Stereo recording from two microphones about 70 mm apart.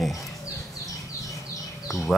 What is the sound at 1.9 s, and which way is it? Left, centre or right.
Speech, left.